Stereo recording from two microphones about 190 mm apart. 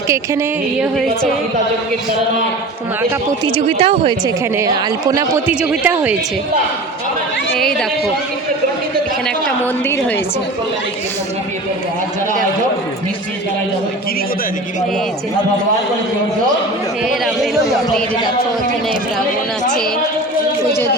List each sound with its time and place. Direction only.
0.1 s music: 15° right (ahead or behind)
3.4 s speech: 30° right (ahead or behind)
4.5 s speech: 20° right (ahead or behind)
5.5 s music: 10° right (ahead or behind)
7.5 s speech: 5° left (ahead or behind)
17.2 s speech: centre (ahead or behind)